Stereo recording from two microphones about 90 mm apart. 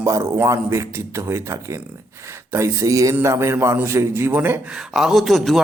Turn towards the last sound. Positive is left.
turn(degrees=0)  # may be behind; listen again after turning